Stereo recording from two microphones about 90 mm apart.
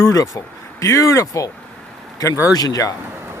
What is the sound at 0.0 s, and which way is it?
Speech, 40° left (ahead or behind).